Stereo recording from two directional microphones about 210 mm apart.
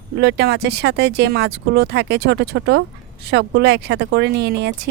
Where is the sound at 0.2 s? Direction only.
50° right (ahead or behind).